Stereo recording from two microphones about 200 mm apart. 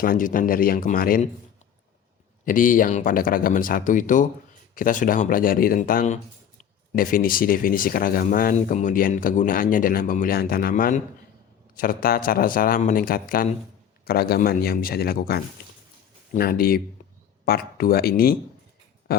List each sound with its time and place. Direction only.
0.0 s speech: 45° left (ahead or behind)
2.4 s speech: 40° left (ahead or behind)